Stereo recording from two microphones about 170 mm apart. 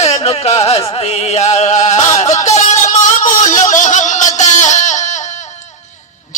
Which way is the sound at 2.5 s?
40° left (ahead or behind).